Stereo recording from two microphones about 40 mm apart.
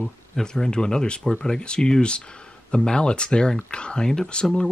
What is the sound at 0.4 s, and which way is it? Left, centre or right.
Speech, centre.